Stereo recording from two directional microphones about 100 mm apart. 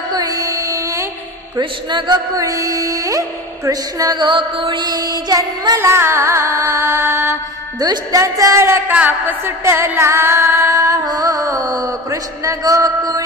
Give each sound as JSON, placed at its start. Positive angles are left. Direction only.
{"t": 0.1, "sound": "music", "side_deg": -40}
{"t": 1.6, "sound": "music", "side_deg": -50}
{"t": 4.2, "sound": "music", "side_deg": -55}
{"t": 5.8, "sound": "music", "side_deg": -25}